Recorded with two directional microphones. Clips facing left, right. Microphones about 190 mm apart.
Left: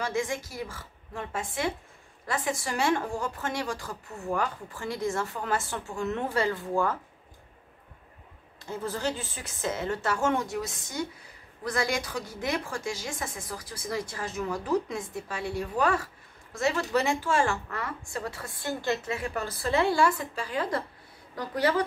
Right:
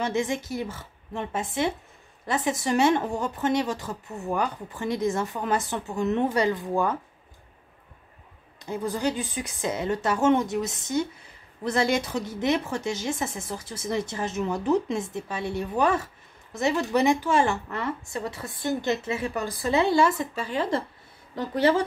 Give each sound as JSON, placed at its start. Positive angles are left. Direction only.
{"t": 0.0, "sound": "a woman's voice", "side_deg": -20}
{"t": 8.5, "sound": "a woman's voice", "side_deg": -15}